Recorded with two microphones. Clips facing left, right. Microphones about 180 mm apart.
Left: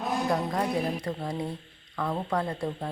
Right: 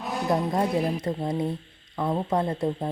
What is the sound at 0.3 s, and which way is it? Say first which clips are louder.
Speech: right 7 dB; 25° right (ahead or behind).